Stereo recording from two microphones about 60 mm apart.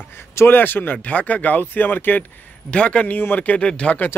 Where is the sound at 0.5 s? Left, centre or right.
Left.